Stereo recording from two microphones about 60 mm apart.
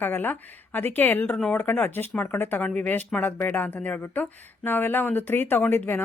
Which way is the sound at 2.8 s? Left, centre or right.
Left.